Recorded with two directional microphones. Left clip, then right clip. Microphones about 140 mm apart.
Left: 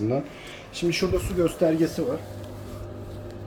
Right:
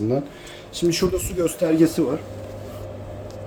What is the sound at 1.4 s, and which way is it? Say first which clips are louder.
Speech: right 4 dB; 60° right (ahead or behind).